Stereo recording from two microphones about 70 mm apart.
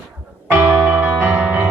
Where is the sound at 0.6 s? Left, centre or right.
Right.